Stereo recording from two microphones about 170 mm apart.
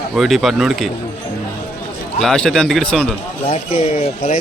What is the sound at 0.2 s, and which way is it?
Speech, centre (ahead or behind).